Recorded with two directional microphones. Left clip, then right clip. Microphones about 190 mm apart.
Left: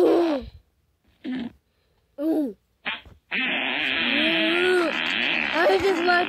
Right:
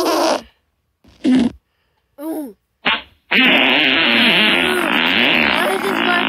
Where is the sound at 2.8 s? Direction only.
70° right (ahead or behind).